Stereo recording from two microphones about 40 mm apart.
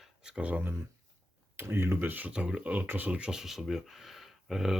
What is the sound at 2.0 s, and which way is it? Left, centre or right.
Speech, right.